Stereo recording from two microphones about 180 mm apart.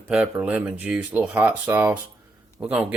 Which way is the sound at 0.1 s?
5° right (ahead or behind).